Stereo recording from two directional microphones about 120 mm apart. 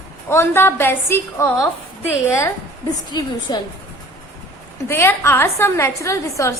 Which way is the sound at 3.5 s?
35° left (ahead or behind).